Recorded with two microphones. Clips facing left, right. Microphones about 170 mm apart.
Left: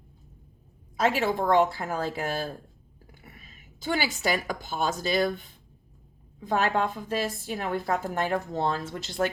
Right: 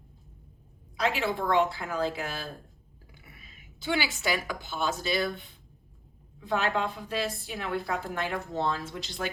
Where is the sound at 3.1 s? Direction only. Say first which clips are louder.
Left 3 dB; 45° left (ahead or behind).